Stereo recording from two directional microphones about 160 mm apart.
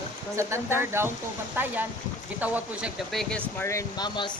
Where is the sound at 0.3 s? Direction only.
15° right (ahead or behind).